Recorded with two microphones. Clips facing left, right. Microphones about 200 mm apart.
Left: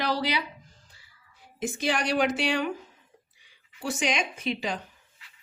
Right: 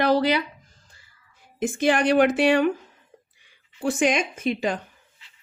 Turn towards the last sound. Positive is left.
turn(degrees=-50)  # may be behind; listen again after turning